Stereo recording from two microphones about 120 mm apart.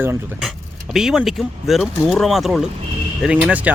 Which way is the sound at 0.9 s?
5° right (ahead or behind).